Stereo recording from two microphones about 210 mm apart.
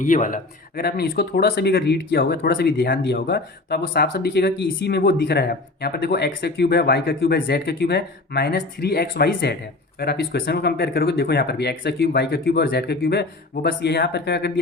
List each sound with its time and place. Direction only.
0.0 s a man's voice: 40° left (ahead or behind)